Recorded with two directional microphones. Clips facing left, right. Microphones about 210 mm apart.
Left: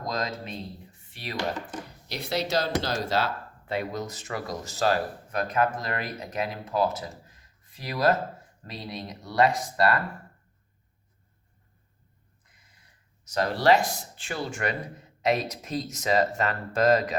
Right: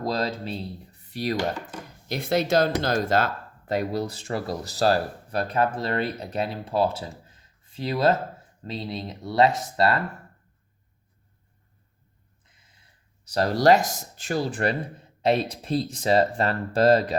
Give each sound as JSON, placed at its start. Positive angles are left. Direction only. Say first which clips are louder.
{"t": 0.0, "sound": "speech", "louder": "right 5 dB", "side_deg": -30}
{"t": 2.0, "sound": "speech", "louder": "right 6 dB", "side_deg": -50}
{"t": 7.3, "sound": "a sound", "louder": "even", "side_deg": -30}
{"t": 8.6, "sound": "speech", "louder": "right 5 dB", "side_deg": -25}
{"t": 13.2, "sound": "speech", "louder": "right 3 dB", "side_deg": -35}